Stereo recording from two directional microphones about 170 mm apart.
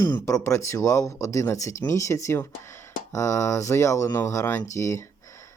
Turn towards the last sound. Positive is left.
turn(degrees=15)  # may be behind; listen again after turning